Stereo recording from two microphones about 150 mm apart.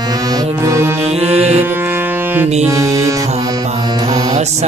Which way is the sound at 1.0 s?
45° right (ahead or behind).